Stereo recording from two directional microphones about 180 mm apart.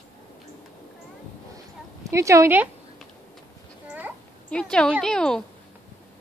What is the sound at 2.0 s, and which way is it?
Speech, 15° right (ahead or behind).